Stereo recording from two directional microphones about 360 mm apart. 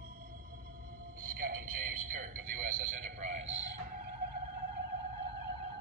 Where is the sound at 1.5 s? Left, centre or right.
Right.